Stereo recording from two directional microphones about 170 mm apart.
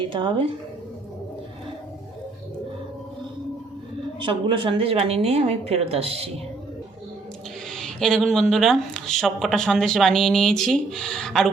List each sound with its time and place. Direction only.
0.1 s speech: 30° right (ahead or behind)
4.2 s a woman's voice: 30° right (ahead or behind)
7.7 s speech: 5° left (ahead or behind)